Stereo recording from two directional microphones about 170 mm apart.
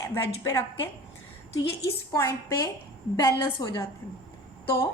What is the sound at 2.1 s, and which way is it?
A woman's voice, 20° left (ahead or behind).